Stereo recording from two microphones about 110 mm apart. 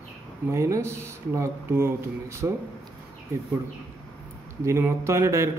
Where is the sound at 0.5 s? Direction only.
25° right (ahead or behind).